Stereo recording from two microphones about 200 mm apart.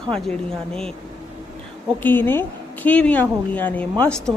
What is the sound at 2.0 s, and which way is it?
A woman's voice, 10° left (ahead or behind).